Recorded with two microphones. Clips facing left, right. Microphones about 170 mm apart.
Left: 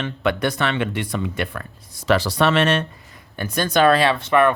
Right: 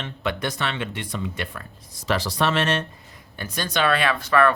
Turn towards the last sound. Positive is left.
turn(degrees=25)  # may be behind; listen again after turning